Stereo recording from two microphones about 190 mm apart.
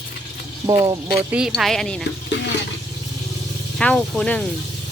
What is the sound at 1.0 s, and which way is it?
Speech, 5° right (ahead or behind).